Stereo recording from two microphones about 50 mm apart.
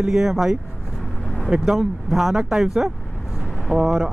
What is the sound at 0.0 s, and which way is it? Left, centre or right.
Speech, centre.